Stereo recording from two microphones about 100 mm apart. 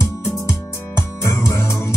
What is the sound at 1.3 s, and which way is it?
Music, 30° left (ahead or behind).